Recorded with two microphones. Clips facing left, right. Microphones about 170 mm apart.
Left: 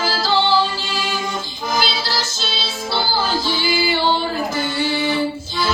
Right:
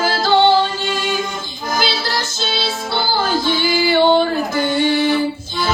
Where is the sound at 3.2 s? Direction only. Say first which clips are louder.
Right 3 dB; 55° right (ahead or behind).